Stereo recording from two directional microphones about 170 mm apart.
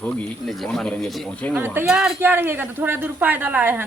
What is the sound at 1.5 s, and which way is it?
Speech, 10° right (ahead or behind).